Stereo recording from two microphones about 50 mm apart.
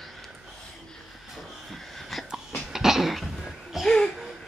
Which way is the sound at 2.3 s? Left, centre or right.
Centre.